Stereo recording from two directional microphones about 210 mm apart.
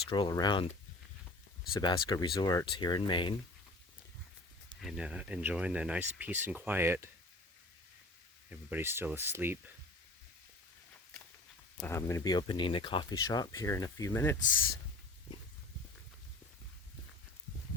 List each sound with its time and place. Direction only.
0.1 s speech: 20° left (ahead or behind)
1.7 s speech: 20° left (ahead or behind)
4.8 s speech: centre (ahead or behind)
8.4 s speech: 10° right (ahead or behind)
11.8 s speech: 10° left (ahead or behind)